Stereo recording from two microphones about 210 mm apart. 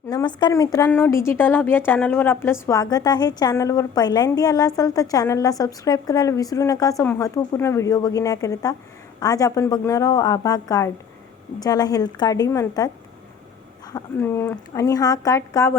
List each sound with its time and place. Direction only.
0.1 s a woman's voice: 20° left (ahead or behind)